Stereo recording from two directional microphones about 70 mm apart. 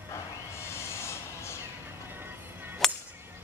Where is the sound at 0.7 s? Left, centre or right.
Left.